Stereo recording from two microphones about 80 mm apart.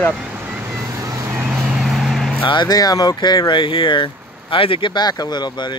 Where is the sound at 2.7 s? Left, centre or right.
Left.